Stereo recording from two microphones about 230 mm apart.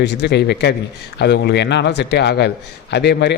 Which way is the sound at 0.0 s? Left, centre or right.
Left.